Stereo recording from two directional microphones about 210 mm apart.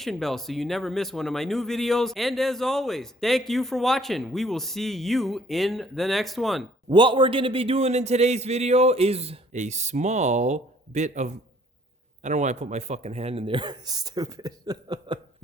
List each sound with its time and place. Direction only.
0.0 s speech: centre (ahead or behind)
6.9 s a man's voice: 25° right (ahead or behind)